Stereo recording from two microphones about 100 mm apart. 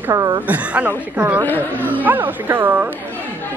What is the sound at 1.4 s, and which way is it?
Speech, 20° left (ahead or behind).